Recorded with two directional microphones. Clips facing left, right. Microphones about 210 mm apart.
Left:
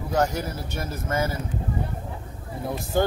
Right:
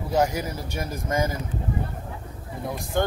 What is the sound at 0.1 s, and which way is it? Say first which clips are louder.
A man's voice: right 1 dB; 10° right (ahead or behind).